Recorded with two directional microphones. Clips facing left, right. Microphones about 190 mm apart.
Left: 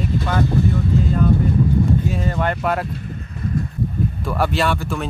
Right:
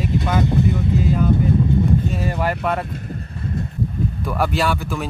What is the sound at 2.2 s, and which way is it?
Speech, 5° right (ahead or behind).